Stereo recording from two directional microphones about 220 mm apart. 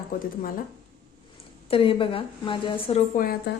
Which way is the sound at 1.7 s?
25° left (ahead or behind).